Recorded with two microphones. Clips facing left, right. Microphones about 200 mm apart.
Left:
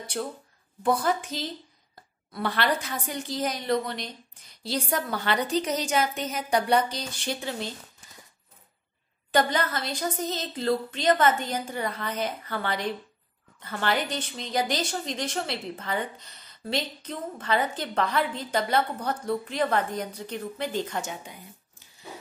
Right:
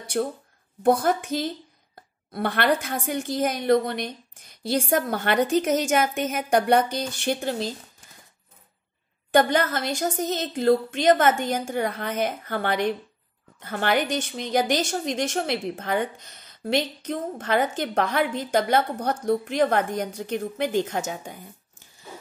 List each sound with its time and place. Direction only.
0.2 s a woman's voice: 50° right (ahead or behind)
7.4 s speech: 35° right (ahead or behind)
9.3 s a woman's voice: 50° right (ahead or behind)